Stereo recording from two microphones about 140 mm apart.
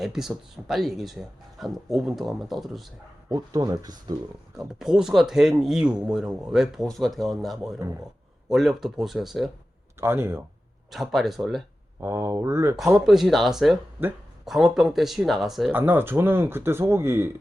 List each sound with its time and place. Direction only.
0.0 s speech: centre (ahead or behind)
3.2 s speech: 30° right (ahead or behind)
4.7 s speech: 5° right (ahead or behind)
7.8 s speech: 20° right (ahead or behind)
8.4 s speech: centre (ahead or behind)
10.0 s speech: 15° right (ahead or behind)
10.9 s speech: centre (ahead or behind)
11.9 s speech: 20° right (ahead or behind)
13.1 s speech: centre (ahead or behind)
14.0 s speech: 15° right (ahead or behind)
14.4 s speech: centre (ahead or behind)
15.7 s speech: 15° right (ahead or behind)